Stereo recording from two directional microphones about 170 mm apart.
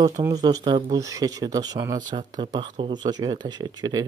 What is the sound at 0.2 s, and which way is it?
Speech, 20° right (ahead or behind).